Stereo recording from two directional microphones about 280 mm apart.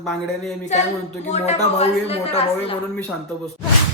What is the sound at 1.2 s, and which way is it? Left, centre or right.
A man's voice, left.